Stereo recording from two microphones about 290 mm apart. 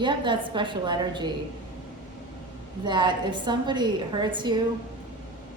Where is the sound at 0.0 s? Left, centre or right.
Centre.